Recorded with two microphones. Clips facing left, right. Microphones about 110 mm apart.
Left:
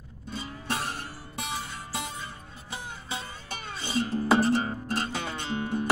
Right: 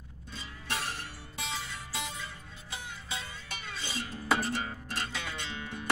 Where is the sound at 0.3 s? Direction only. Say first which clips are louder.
Left 6 dB; 35° left (ahead or behind).